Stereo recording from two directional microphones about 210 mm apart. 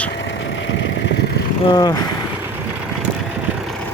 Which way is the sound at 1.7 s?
20° left (ahead or behind).